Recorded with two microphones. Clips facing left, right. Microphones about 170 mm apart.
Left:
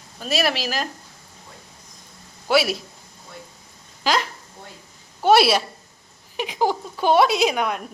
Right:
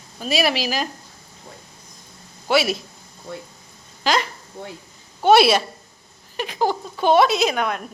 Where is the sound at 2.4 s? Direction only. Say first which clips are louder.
Even; 5° left (ahead or behind).